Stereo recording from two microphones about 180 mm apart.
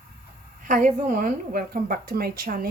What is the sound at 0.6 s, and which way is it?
Speech, 45° right (ahead or behind).